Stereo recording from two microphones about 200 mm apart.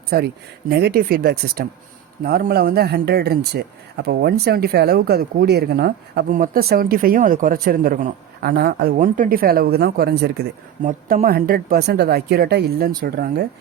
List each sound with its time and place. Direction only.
0.1 s speech: 50° right (ahead or behind)
10.8 s speech: 40° right (ahead or behind)